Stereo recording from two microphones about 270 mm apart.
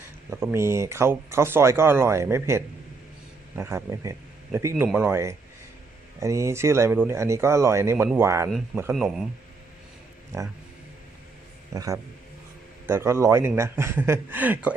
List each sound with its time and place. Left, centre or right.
0.3 s speech: centre
10.3 s speech: centre
11.7 s speech: centre